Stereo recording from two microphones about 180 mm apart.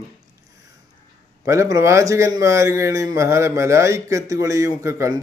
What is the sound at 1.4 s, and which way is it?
A man's voice, 15° right (ahead or behind).